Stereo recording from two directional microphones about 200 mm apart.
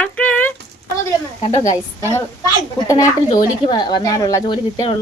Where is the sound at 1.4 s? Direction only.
35° left (ahead or behind).